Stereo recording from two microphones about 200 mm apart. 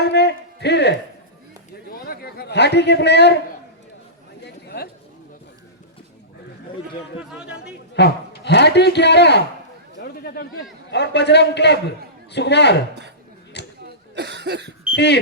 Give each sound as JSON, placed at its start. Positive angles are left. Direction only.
{"t": 0.0, "sound": "music", "side_deg": 55}
{"t": 1.9, "sound": "a man's voice", "side_deg": 50}
{"t": 4.4, "sound": "chatter", "side_deg": 55}
{"t": 7.4, "sound": "a man's voice", "side_deg": 55}
{"t": 13.5, "sound": "a sound", "side_deg": 60}
{"t": 14.2, "sound": "cough", "side_deg": -60}
{"t": 14.9, "sound": "speech", "side_deg": 55}